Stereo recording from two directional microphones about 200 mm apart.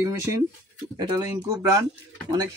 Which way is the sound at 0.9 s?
15° right (ahead or behind).